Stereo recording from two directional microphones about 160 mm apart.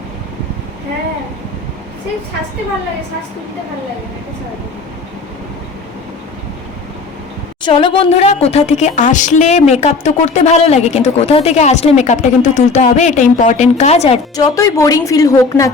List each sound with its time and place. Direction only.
7.6 s a woman's voice: 30° left (ahead or behind)
14.3 s a woman's voice: 20° left (ahead or behind)